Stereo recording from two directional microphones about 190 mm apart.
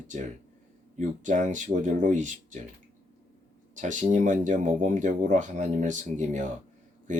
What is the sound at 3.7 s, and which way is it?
Speech, 40° right (ahead or behind).